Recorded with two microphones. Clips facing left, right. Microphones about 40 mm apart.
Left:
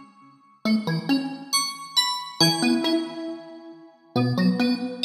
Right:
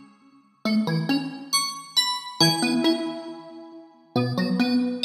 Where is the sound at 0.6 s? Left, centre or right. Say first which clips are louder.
Even; centre.